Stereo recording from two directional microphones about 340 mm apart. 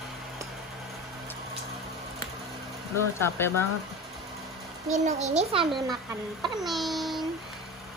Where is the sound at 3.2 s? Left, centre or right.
Centre.